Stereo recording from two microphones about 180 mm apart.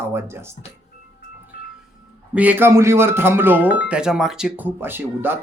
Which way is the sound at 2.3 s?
10° right (ahead or behind).